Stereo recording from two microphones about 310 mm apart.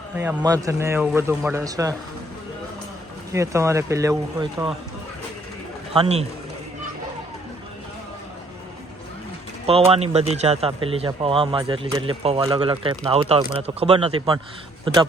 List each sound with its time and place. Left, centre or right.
0.2 s speech: centre
3.3 s speech: centre
5.9 s a man's voice: centre
9.6 s speech: centre